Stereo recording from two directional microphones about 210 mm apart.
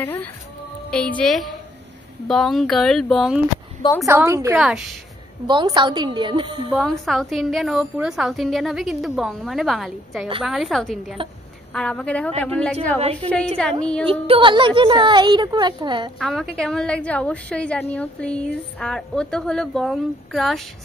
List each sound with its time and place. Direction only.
0.0 s a woman's voice: 10° left (ahead or behind)
4.0 s a woman's voice: 10° right (ahead or behind)
5.5 s a woman's voice: 20° right (ahead or behind)
6.7 s a woman's voice: centre (ahead or behind)
14.0 s a woman's voice: 25° right (ahead or behind)
16.2 s a woman's voice: centre (ahead or behind)